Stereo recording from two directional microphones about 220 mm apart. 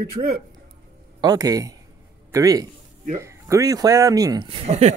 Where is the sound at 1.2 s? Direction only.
15° right (ahead or behind).